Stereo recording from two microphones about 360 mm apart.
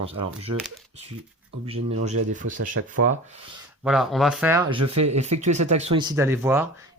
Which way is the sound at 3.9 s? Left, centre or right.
Centre.